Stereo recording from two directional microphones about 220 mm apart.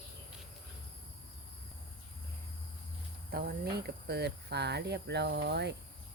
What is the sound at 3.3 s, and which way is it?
Speech, 45° right (ahead or behind).